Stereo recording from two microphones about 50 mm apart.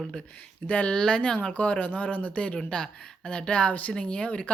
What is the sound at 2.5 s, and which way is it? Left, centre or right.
Speech, centre.